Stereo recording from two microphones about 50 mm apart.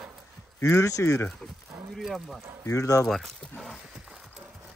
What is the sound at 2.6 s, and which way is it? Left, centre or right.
Speech, left.